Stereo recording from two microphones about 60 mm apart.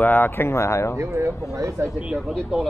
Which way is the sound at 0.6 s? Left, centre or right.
Left.